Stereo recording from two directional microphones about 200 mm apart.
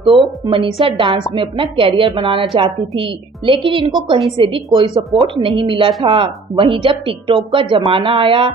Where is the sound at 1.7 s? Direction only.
25° right (ahead or behind).